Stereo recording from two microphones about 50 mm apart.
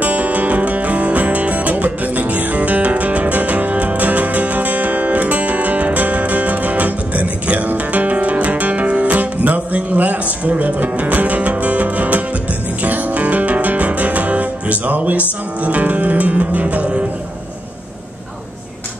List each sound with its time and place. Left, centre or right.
0.0 s music: right